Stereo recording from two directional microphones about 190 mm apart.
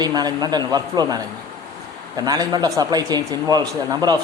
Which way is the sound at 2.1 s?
20° right (ahead or behind).